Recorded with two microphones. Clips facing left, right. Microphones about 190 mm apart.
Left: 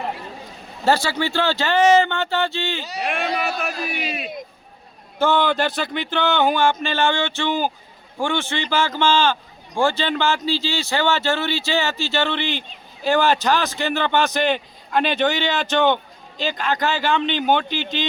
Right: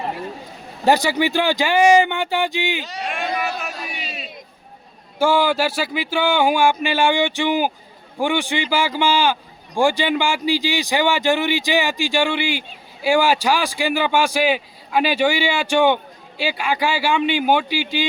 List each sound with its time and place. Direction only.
0.9 s a man's voice: 15° right (ahead or behind)
3.1 s a sound: 60° left (ahead or behind)
5.2 s a man's voice: 10° right (ahead or behind)